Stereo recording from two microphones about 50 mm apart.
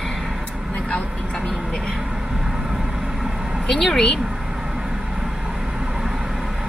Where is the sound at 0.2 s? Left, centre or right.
Centre.